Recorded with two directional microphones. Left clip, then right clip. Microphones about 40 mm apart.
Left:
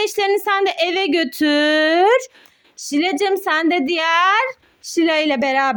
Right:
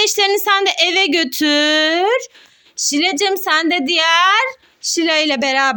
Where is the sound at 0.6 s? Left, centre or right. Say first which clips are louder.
Right 3 dB; left.